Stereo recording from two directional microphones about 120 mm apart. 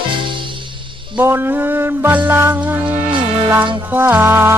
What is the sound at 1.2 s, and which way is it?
Music, 20° right (ahead or behind).